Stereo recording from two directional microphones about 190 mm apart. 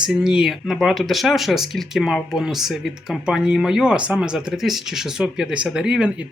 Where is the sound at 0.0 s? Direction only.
5° right (ahead or behind).